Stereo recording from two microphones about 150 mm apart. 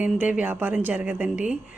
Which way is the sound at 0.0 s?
10° right (ahead or behind).